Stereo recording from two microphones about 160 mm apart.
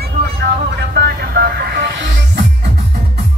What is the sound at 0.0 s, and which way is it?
Vehicle, 90° right.